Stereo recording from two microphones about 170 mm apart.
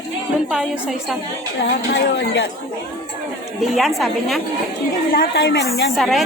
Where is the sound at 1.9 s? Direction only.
90° left.